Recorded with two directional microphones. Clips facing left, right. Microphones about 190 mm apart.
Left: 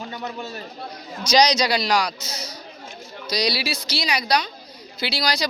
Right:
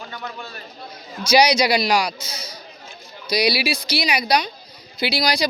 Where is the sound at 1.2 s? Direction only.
10° right (ahead or behind).